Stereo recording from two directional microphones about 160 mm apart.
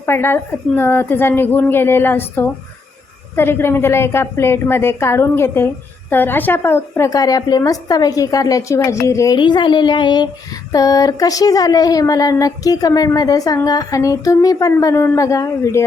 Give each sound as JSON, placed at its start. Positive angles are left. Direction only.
{"t": 0.0, "sound": "a woman's voice", "side_deg": 15}